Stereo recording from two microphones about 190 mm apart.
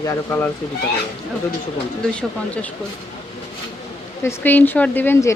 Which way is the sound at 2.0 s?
5° left (ahead or behind).